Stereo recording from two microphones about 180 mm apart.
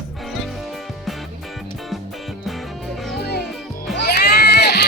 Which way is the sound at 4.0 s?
65° left (ahead or behind).